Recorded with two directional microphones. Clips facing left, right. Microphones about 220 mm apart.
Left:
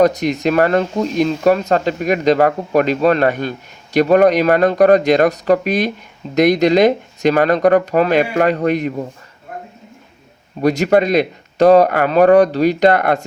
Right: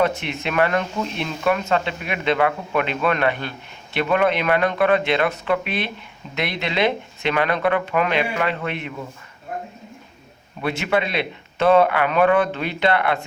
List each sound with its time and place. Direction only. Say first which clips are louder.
0.0 s speech: left 8 dB; 40° left (ahead or behind)
10.6 s speech: left 9 dB; 40° left (ahead or behind)